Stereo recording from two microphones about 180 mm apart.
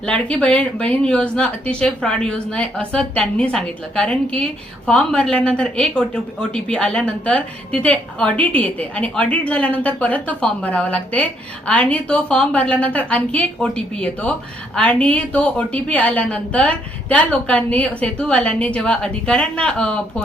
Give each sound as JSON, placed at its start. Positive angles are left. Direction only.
{"t": 0.0, "sound": "a woman's voice", "side_deg": 5}